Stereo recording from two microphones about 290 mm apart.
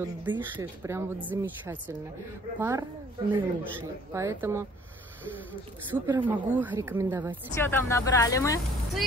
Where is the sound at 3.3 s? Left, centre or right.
Centre.